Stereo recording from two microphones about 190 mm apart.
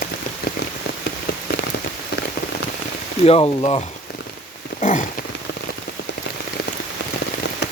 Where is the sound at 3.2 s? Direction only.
30° left (ahead or behind).